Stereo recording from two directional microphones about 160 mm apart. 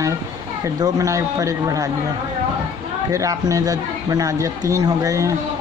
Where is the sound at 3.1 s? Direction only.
20° right (ahead or behind).